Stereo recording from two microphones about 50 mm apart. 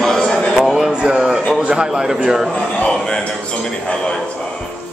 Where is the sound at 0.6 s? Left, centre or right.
Centre.